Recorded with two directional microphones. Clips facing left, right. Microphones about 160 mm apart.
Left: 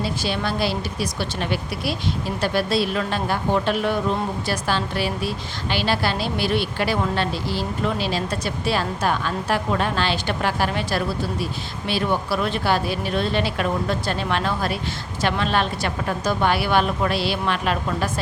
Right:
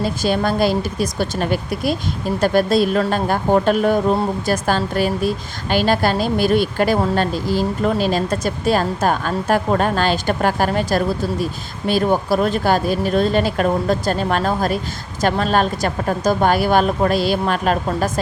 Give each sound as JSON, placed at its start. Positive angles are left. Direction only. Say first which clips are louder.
{"t": 0.0, "sound": "speech", "louder": "right 6 dB", "side_deg": -45}